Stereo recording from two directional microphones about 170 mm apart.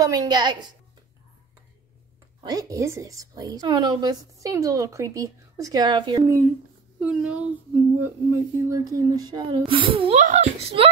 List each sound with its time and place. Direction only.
0.0 s a woman's voice: 20° right (ahead or behind)
2.4 s a woman's voice: 20° right (ahead or behind)
6.2 s a woman's voice: 15° right (ahead or behind); by 10.1 s 30° right (ahead or behind)
10.1 s speech: 45° right (ahead or behind)